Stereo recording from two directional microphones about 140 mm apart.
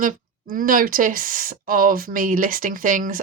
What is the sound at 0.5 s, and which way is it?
Speech, 80° right.